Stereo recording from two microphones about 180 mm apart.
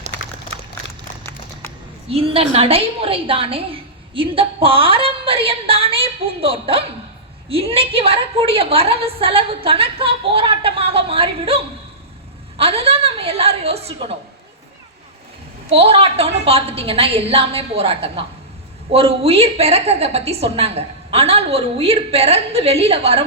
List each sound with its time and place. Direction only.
0.1 s a sound: 75° left (ahead or behind)
2.0 s a woman's voice: 30° right (ahead or behind)
15.7 s a woman's voice: 30° right (ahead or behind)